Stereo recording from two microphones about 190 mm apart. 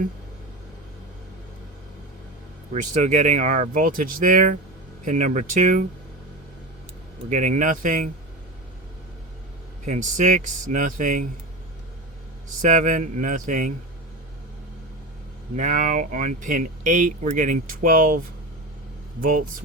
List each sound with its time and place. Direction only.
2.7 s speech: 40° right (ahead or behind)
7.3 s speech: 40° right (ahead or behind)
9.8 s speech: 40° right (ahead or behind)
12.6 s speech: 45° right (ahead or behind)
15.5 s speech: 40° right (ahead or behind)